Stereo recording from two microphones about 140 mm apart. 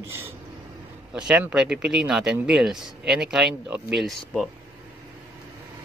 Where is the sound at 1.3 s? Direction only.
10° right (ahead or behind).